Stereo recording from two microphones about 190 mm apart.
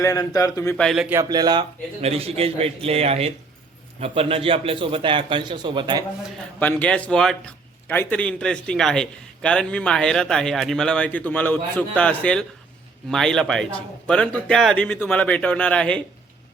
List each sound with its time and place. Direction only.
0.0 s a man's voice: 20° left (ahead or behind)
0.8 s a man's voice: centre (ahead or behind)
1.1 s a man's voice: 20° right (ahead or behind)
2.0 s a man's voice: 30° right (ahead or behind)
6.6 s a man's voice: 10° left (ahead or behind)